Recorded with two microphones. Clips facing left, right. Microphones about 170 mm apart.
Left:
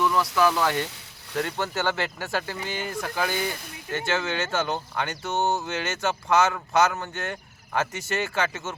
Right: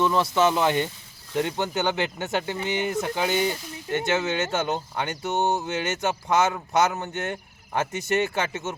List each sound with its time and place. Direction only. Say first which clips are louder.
0.0 s speech: right 1 dB; 25° right (ahead or behind)